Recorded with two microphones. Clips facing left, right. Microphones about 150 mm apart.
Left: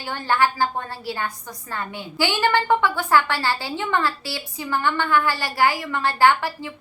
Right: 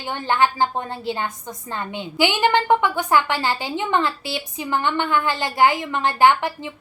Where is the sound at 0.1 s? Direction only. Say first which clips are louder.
Right 1 dB; 20° right (ahead or behind).